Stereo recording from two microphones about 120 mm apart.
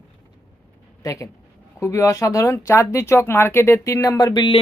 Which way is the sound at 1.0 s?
25° left (ahead or behind).